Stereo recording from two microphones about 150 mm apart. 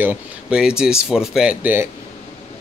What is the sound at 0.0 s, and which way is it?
Speech, 10° right (ahead or behind).